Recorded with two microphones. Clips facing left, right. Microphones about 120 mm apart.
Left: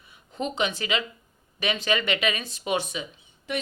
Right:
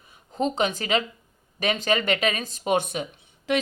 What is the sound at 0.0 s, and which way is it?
Speech, 40° right (ahead or behind).